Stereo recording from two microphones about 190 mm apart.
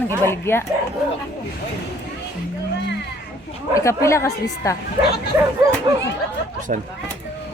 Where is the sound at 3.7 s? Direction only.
15° left (ahead or behind).